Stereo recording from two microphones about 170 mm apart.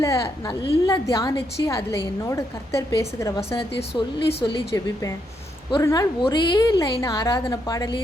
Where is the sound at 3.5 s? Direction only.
30° left (ahead or behind).